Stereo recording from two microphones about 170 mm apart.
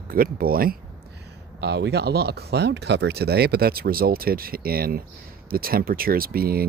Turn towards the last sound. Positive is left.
turn(degrees=-60)  # may be behind; listen again after turning